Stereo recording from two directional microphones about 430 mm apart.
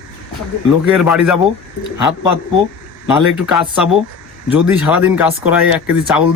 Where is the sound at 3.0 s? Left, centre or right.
Centre.